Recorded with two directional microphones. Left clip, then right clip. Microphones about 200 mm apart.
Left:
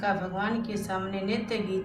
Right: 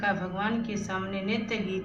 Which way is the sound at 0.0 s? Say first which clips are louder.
Even; 20° left (ahead or behind).